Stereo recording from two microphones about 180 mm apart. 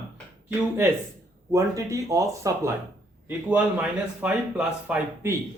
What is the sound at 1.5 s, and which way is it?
A man's voice, 20° right (ahead or behind).